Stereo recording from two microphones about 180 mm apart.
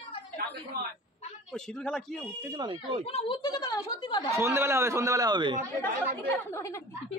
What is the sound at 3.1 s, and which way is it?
A woman's voice, 30° left (ahead or behind).